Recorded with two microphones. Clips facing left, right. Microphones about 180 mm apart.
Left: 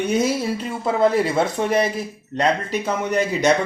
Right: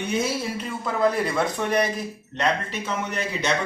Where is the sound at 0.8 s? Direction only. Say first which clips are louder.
Left 5 dB; 25° left (ahead or behind).